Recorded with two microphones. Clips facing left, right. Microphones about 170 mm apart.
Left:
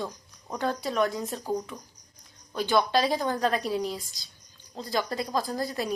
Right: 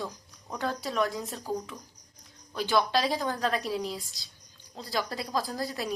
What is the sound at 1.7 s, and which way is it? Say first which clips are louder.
Speech: left 3 dB; 25° left (ahead or behind).